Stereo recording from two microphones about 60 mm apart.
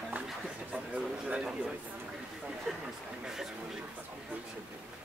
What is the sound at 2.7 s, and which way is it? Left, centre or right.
Speech, centre.